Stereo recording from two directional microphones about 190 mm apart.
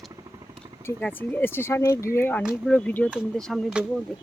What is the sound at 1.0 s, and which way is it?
Speech, 10° left (ahead or behind).